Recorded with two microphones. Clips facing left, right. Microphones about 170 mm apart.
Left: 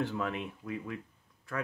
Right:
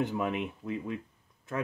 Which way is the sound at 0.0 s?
20° right (ahead or behind).